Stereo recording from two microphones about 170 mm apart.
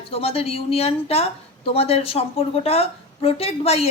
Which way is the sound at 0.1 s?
35° left (ahead or behind).